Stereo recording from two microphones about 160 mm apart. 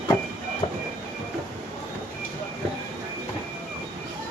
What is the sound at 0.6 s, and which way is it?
Train, 35° left (ahead or behind).